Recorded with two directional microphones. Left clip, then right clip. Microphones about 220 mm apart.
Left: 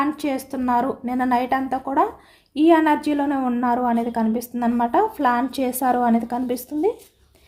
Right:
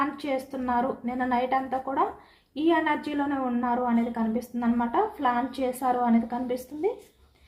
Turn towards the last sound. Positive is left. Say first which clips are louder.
# left 6 dB
turn(degrees=50)  # may be behind; listen again after turning